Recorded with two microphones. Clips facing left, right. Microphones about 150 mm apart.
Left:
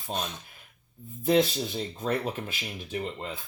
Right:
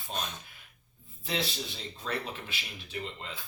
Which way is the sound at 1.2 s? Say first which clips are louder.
Left 11 dB; 50° left (ahead or behind).